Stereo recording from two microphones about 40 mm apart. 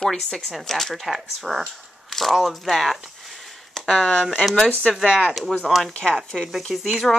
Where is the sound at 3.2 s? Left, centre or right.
Centre.